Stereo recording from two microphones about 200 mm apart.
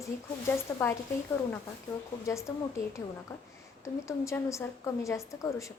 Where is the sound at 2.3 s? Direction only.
15° left (ahead or behind).